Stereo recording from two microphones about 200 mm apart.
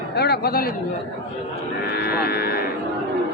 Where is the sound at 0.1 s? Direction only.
55° left (ahead or behind).